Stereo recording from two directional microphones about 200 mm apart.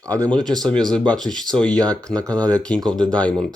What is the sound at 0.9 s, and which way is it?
Speech, 5° left (ahead or behind).